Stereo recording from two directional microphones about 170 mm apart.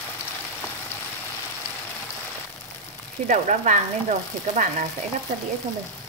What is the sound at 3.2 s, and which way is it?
Speech, 45° right (ahead or behind).